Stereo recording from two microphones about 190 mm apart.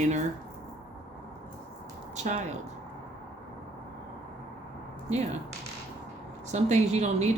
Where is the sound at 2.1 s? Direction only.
40° right (ahead or behind).